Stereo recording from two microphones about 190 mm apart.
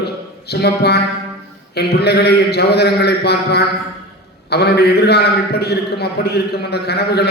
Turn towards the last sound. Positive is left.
turn(degrees=60)  # may be behind; listen again after turning